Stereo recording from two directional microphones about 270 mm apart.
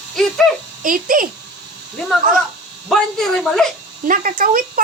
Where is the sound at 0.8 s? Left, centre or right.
Right.